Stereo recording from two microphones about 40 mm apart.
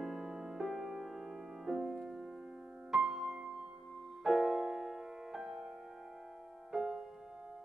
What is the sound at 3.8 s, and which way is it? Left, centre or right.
Music, centre.